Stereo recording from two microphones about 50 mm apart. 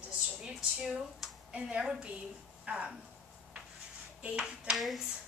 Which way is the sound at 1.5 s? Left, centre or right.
Right.